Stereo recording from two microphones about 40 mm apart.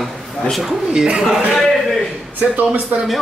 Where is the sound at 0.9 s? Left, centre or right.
Right.